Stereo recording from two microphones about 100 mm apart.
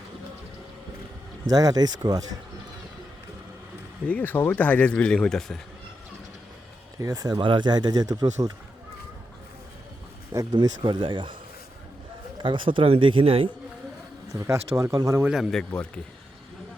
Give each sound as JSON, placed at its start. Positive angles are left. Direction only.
{"t": 1.5, "sound": "speech", "side_deg": -40}
{"t": 4.0, "sound": "speech", "side_deg": 15}
{"t": 7.0, "sound": "speech", "side_deg": -40}
{"t": 7.4, "sound": "speech", "side_deg": -50}
{"t": 10.5, "sound": "speech", "side_deg": -45}
{"t": 12.4, "sound": "a man's voice", "side_deg": -55}
{"t": 14.3, "sound": "speech", "side_deg": -30}
{"t": 15.2, "sound": "speech", "side_deg": -5}
{"t": 15.4, "sound": "speech", "side_deg": 5}